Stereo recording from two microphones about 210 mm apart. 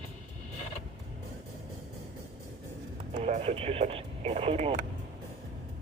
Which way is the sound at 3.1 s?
30° right (ahead or behind).